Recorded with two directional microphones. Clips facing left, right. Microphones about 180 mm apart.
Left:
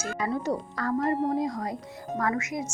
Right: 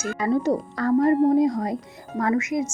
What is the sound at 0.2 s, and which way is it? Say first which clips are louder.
A woman's voice: right 7 dB; 25° right (ahead or behind).